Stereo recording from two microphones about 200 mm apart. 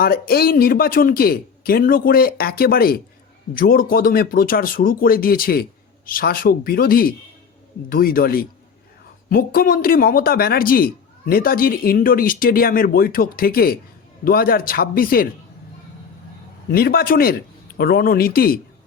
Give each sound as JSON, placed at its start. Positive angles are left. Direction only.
{"t": 0.0, "sound": "speech", "side_deg": 50}
{"t": 16.7, "sound": "speech", "side_deg": 50}